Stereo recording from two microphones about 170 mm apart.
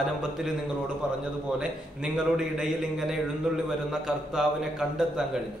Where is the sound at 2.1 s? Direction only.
5° right (ahead or behind).